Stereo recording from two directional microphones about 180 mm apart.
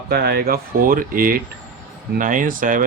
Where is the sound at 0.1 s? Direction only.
60° right (ahead or behind).